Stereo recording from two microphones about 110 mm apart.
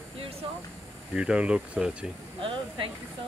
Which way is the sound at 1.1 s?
10° right (ahead or behind).